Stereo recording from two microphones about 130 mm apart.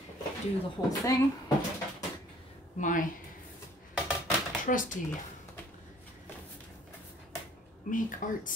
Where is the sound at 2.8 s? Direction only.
90° left.